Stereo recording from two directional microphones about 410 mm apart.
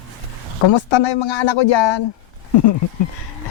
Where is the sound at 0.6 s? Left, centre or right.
Left.